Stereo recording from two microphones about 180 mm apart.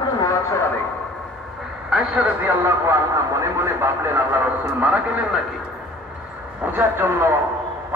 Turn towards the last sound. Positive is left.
turn(degrees=-15)  # may be behind; listen again after turning